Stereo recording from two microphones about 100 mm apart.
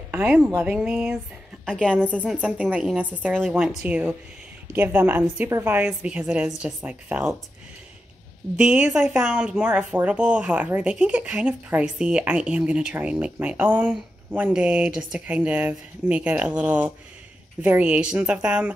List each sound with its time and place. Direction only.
0.1 s a woman's voice: 10° right (ahead or behind)
1.7 s a woman's voice: 10° left (ahead or behind)
2.2 s a woman's voice: 10° right (ahead or behind)
8.5 s speech: 10° right (ahead or behind)
14.5 s speech: 10° right (ahead or behind)